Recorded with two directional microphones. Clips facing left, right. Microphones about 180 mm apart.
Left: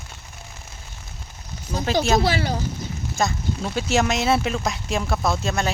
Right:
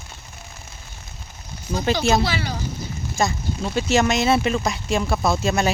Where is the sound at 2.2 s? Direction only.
50° left (ahead or behind).